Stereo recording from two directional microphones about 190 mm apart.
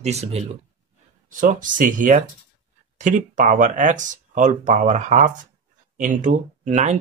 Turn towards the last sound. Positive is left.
turn(degrees=-35)  # may be behind; listen again after turning